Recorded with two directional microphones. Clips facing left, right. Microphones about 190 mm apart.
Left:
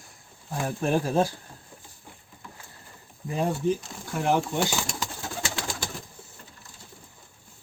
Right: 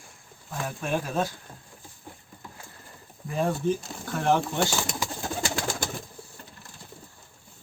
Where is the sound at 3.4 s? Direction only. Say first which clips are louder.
Even; 15° left (ahead or behind).